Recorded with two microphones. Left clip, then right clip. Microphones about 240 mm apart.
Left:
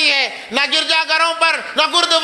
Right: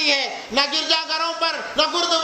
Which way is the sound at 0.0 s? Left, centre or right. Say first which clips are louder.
Left 5 dB; left.